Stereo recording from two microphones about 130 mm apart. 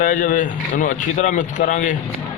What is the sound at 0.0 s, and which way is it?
Speech, 90° left.